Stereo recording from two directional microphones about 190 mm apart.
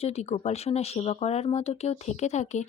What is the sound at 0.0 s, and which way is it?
Speech, 35° left (ahead or behind).